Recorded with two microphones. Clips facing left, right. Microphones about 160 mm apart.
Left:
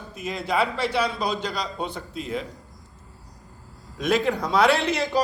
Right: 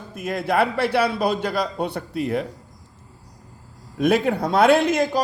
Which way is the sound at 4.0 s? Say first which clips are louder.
Right 4 dB; 55° right (ahead or behind).